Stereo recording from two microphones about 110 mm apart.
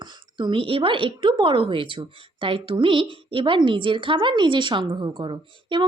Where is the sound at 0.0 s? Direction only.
45° right (ahead or behind).